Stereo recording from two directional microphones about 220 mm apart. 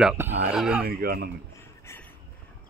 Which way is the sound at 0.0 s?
5° right (ahead or behind).